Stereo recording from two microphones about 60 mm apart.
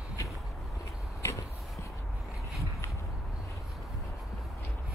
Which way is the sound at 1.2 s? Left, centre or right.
Left.